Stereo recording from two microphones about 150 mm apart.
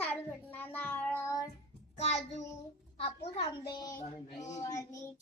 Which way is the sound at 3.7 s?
30° left (ahead or behind).